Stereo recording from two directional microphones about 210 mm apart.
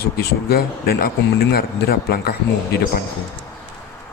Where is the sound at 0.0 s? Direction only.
50° left (ahead or behind).